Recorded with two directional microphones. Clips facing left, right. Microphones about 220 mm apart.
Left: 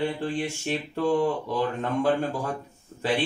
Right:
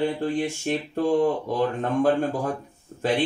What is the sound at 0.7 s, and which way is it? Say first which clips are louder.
Speech: right 3 dB; 50° right (ahead or behind).